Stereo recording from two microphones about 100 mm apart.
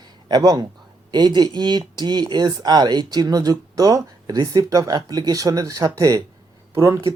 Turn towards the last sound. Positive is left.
turn(degrees=-30)  # may be behind; listen again after turning